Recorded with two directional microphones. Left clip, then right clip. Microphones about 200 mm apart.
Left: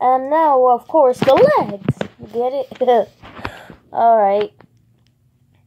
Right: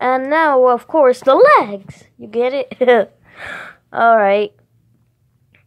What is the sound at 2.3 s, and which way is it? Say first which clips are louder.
Speech: right 3 dB; 55° right (ahead or behind).